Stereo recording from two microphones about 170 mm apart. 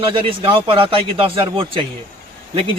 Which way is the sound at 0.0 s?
30° right (ahead or behind).